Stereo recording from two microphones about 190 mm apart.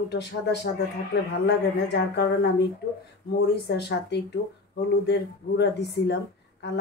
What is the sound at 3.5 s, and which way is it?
Speech, 60° left (ahead or behind).